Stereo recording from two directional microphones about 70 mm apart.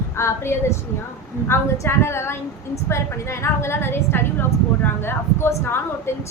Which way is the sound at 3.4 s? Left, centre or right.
Left.